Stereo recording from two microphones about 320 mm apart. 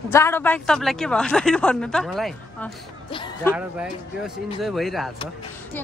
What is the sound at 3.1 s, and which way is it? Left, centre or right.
Music, centre.